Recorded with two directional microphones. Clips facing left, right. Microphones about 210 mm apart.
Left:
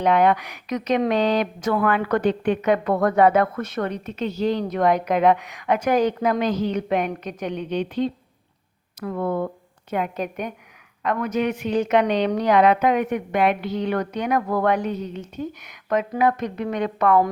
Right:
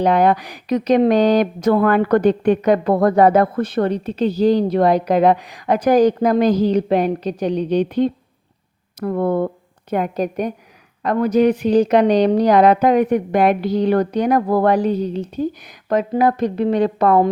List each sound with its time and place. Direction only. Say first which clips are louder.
0.0 s a woman's voice: right 3 dB; 35° right (ahead or behind)
7.9 s speech: right 6 dB; 55° right (ahead or behind)
9.9 s a woman's voice: right 6 dB; 40° right (ahead or behind)